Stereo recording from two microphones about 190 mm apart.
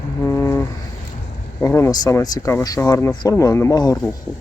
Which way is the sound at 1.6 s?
15° left (ahead or behind).